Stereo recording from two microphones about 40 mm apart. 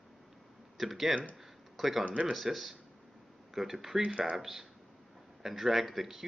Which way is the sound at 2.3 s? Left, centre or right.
Centre.